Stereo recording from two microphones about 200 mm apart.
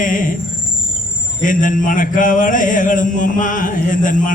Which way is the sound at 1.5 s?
40° left (ahead or behind).